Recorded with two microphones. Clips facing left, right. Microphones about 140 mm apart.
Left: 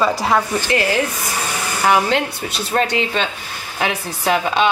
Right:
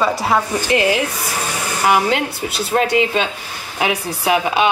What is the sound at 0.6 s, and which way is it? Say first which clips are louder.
Speech: right 2 dB; 15° right (ahead or behind).